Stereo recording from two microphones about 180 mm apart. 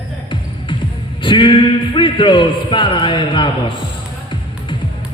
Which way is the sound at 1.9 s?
25° left (ahead or behind).